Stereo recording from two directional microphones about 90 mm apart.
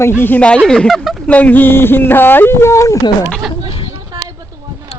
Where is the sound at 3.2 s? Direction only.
5° left (ahead or behind).